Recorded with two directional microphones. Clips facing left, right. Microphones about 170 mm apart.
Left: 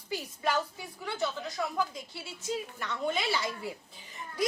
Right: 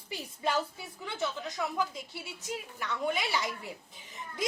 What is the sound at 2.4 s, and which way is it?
Speech, 15° right (ahead or behind).